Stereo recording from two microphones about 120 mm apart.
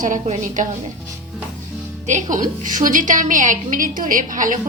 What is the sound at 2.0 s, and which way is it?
A woman's voice, 90° right.